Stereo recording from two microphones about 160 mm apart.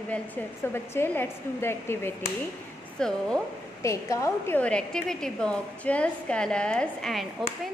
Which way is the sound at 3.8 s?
20° left (ahead or behind).